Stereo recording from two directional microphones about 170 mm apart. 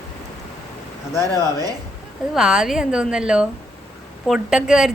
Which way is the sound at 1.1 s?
15° left (ahead or behind).